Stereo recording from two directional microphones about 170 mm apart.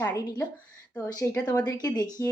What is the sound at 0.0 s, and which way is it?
Speech, 20° left (ahead or behind).